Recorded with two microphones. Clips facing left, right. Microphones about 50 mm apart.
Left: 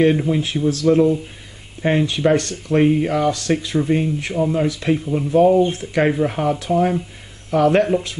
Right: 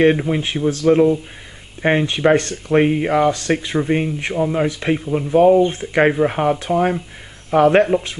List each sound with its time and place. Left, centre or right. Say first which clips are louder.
0.0 s speech: right 1 dB; right
5.0 s speech: right 1 dB; centre
5.3 s speech: right 2 dB; right